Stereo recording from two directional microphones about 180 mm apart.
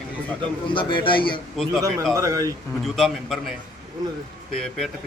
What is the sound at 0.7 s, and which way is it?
Speech, 25° left (ahead or behind).